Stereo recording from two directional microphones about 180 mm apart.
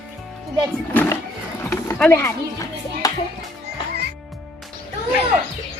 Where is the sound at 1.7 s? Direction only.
10° left (ahead or behind).